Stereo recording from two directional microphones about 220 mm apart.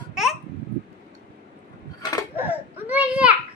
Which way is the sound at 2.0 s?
15° left (ahead or behind).